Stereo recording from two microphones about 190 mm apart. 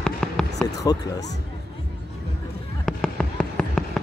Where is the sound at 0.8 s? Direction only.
20° left (ahead or behind).